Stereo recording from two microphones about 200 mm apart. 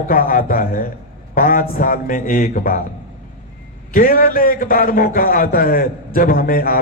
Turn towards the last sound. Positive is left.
turn(degrees=45)  # may be behind; listen again after turning